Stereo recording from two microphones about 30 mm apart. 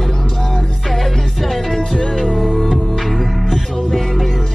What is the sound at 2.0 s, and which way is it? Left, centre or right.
Music, centre.